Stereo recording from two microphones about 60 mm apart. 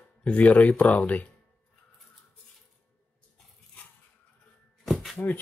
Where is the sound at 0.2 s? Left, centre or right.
Left.